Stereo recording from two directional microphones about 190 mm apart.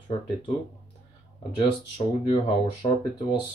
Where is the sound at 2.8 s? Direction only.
30° left (ahead or behind).